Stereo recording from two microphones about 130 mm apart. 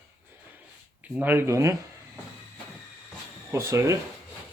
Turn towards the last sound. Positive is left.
turn(degrees=-25)  # may be behind; listen again after turning